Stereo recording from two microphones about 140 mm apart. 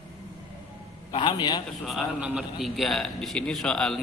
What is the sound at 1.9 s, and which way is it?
A man's voice, 5° right (ahead or behind).